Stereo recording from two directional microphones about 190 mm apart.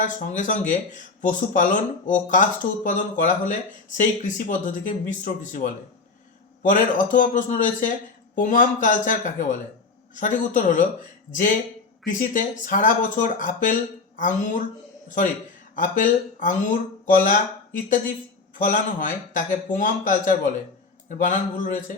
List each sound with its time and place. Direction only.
0.0 s a man's voice: 40° left (ahead or behind)
15.7 s a man's voice: 45° left (ahead or behind)
18.6 s a man's voice: 45° left (ahead or behind)